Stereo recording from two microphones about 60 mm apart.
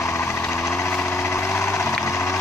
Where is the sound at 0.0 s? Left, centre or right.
Left.